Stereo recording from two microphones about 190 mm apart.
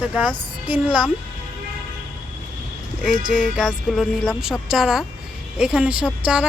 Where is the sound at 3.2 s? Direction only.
40° left (ahead or behind).